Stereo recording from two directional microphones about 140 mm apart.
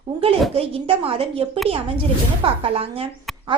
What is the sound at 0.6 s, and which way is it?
A woman's voice, 40° right (ahead or behind).